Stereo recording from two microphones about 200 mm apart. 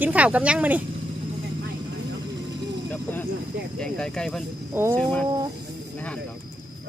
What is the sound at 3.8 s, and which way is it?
Speech, 5° left (ahead or behind).